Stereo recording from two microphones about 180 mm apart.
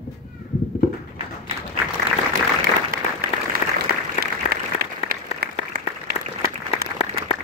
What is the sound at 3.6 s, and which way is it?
Applause, 45° left (ahead or behind).